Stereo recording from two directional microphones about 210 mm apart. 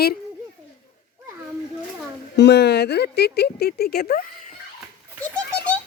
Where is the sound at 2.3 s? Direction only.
55° left (ahead or behind).